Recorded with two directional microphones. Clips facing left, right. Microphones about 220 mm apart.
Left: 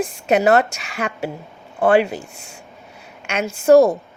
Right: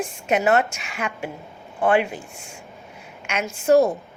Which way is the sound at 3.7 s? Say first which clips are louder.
Left 5 dB; 80° left.